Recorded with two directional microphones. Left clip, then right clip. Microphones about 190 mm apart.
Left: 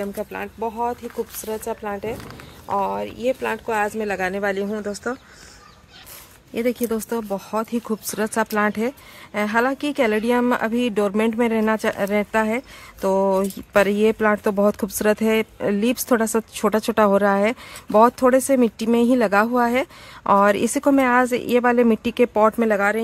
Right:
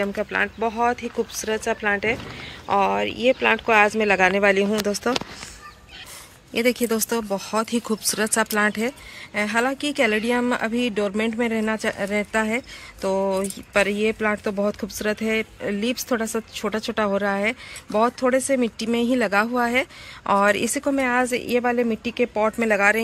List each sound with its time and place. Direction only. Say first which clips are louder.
0.0 s speech: right 5 dB; 5° left (ahead or behind)
6.5 s a woman's voice: right 1 dB; 15° left (ahead or behind)
13.0 s speech: left 4 dB; 40° left (ahead or behind)
14.6 s speech: left 5 dB; 45° left (ahead or behind)
22.5 s a woman's voice: even; 30° left (ahead or behind)